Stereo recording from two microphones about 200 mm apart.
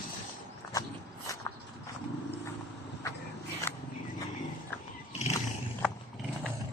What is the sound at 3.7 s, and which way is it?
Wild animals, 10° left (ahead or behind).